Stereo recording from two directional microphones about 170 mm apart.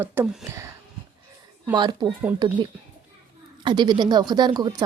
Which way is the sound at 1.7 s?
25° right (ahead or behind).